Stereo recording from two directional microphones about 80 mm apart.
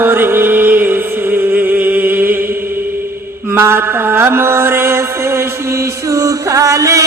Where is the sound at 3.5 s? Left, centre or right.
Right.